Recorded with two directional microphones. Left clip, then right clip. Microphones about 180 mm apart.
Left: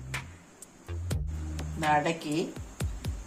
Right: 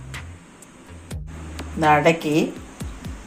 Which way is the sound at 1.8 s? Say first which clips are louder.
Right 10 dB; 35° right (ahead or behind).